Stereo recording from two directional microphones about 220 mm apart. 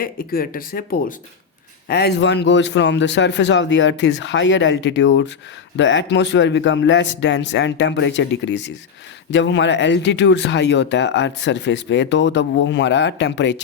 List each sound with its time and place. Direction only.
0.0 s speech: 40° left (ahead or behind)